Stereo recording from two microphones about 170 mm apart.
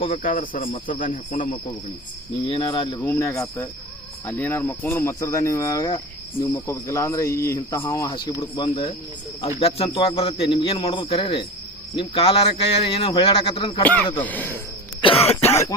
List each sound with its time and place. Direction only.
0.2 s speech: 55° left (ahead or behind)
2.5 s speech: 30° left (ahead or behind)
3.0 s a man's voice: 15° left (ahead or behind); by 13.8 s 35° left (ahead or behind)
13.8 s speech: 10° left (ahead or behind)
15.0 s throat clearing: 35° left (ahead or behind)
15.4 s speech: 15° left (ahead or behind)